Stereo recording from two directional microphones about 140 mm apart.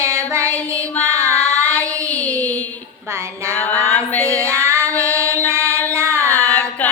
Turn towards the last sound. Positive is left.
turn(degrees=10)  # may be behind; listen again after turning